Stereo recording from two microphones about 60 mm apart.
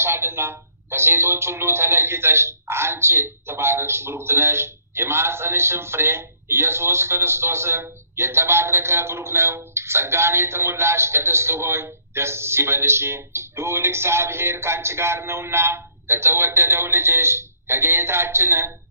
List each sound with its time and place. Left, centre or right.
0.0 s speech: right